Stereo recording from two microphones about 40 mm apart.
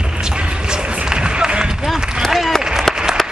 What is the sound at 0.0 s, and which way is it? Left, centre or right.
Music, centre.